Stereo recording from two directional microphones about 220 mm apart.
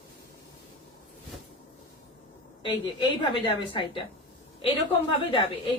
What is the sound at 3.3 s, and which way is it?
Speech, 25° left (ahead or behind).